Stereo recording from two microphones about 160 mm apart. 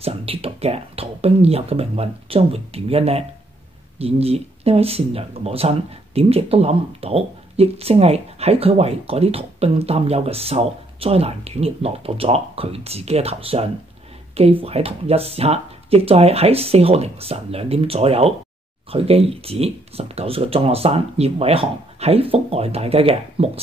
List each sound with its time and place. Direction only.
0.0 s speech: 35° right (ahead or behind)